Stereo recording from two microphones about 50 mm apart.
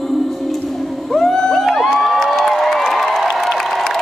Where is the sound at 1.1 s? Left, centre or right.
Centre.